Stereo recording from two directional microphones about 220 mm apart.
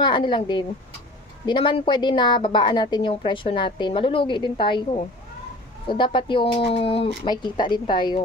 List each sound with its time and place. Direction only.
0.0 s a woman's voice: 20° left (ahead or behind)